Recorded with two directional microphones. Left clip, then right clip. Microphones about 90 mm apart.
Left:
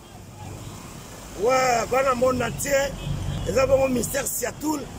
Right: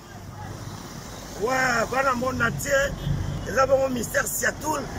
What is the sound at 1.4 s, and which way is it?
Speech, 50° left (ahead or behind).